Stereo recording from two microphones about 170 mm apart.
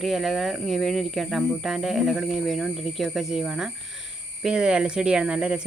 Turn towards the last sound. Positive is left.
turn(degrees=-5)  # may be behind; listen again after turning